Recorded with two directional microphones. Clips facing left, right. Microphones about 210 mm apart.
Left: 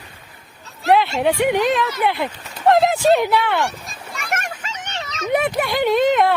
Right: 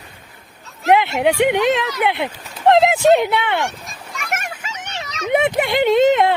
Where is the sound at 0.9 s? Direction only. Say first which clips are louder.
Right 2 dB; 20° right (ahead or behind).